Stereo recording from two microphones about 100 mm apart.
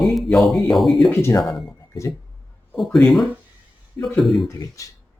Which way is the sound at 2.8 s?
5° left (ahead or behind).